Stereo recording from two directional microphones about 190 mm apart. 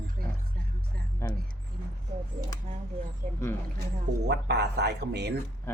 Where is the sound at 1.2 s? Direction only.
15° left (ahead or behind).